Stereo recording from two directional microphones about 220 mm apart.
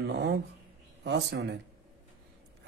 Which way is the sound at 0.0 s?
50° right (ahead or behind).